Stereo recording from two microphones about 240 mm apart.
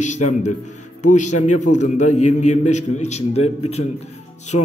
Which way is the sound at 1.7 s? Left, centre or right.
Left.